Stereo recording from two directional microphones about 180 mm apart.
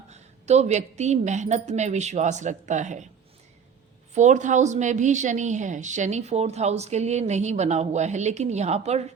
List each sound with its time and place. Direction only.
0.1 s a woman's voice: 35° right (ahead or behind)
4.1 s a woman's voice: 40° right (ahead or behind)